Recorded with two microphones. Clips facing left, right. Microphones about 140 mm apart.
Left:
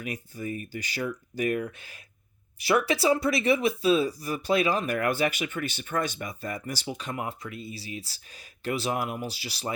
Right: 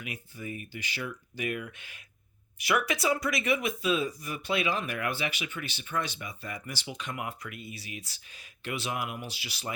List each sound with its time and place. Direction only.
0.0 s speech: 40° left (ahead or behind)